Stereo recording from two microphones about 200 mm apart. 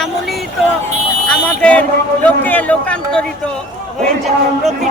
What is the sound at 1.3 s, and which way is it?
Speech, 5° left (ahead or behind).